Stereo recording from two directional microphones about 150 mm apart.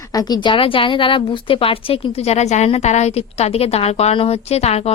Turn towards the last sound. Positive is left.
turn(degrees=45)  # may be behind; listen again after turning